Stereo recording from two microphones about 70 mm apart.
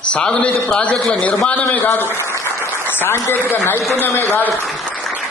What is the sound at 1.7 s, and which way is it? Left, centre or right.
Speech, left.